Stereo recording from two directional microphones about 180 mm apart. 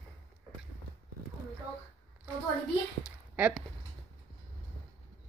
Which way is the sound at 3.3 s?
10° right (ahead or behind).